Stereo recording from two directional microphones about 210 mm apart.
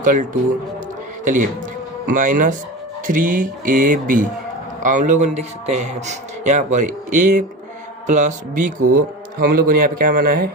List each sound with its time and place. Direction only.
0.0 s a man's voice: 40° right (ahead or behind)